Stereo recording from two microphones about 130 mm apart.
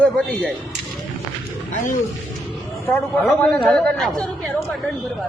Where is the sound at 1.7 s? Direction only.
80° left.